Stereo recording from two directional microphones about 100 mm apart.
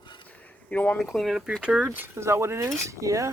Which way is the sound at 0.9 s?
Centre (ahead or behind).